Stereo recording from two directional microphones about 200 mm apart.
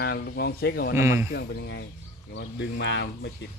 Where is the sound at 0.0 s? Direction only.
55° left (ahead or behind).